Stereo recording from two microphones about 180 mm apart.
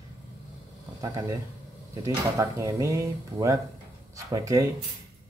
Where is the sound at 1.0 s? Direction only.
20° right (ahead or behind).